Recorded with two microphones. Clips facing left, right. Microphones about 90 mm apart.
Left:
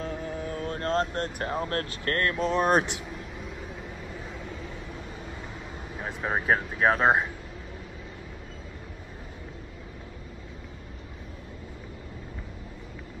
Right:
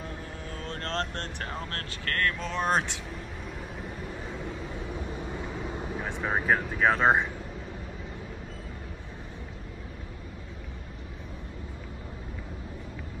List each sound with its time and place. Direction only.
0.0 s a sound: 20° left (ahead or behind)
1.4 s speech: 25° left (ahead or behind)
2.5 s speech: 15° left (ahead or behind)
5.9 s speech: 5° left (ahead or behind)